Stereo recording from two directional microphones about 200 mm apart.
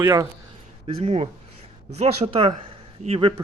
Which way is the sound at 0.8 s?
30° right (ahead or behind).